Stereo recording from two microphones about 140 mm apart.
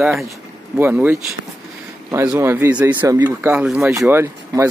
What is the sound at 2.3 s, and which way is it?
Speech, 20° right (ahead or behind).